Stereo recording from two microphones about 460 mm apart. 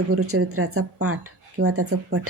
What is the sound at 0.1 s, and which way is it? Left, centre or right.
Speech, right.